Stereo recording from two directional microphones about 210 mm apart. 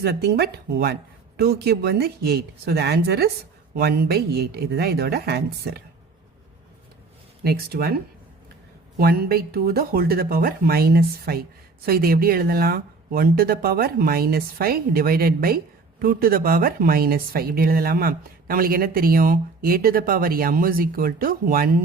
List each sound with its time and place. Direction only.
0.0 s speech: 50° right (ahead or behind)
7.4 s speech: 50° right (ahead or behind)
9.0 s speech: 45° right (ahead or behind)